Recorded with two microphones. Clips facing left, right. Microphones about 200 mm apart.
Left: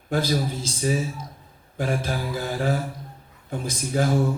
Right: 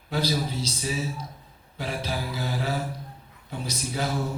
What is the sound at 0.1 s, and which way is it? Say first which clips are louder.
Music: left 3 dB; 50° left (ahead or behind).